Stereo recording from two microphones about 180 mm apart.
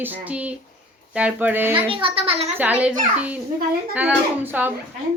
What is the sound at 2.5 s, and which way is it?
Speech, 10° right (ahead or behind).